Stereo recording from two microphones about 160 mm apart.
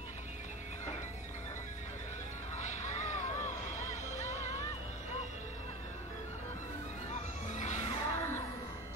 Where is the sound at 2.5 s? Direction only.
50° left (ahead or behind).